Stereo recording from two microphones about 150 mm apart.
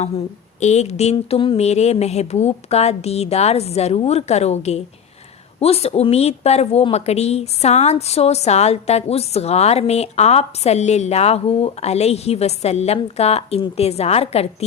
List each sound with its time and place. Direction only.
0.6 s a woman's voice: 50° left (ahead or behind)
1.1 s a woman's voice: 35° left (ahead or behind)